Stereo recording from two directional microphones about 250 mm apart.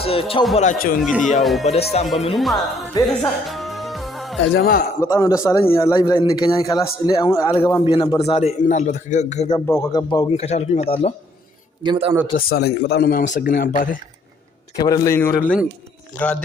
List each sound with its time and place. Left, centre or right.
0.0 s a man's voice: left
0.9 s speech: centre
2.0 s speech: left
2.3 s speech: centre
3.2 s music: centre
4.5 s a man's voice: left
5.0 s a man's voice: centre; by 9.5 s left
9.5 s speech: centre
11.8 s a man's voice: centre
12.4 s a man's voice: left
14.8 s a man's voice: centre